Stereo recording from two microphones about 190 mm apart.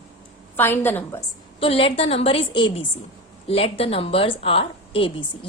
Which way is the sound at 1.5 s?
30° left (ahead or behind).